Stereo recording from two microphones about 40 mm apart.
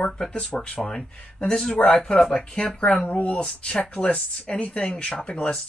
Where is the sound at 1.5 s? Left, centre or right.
Centre.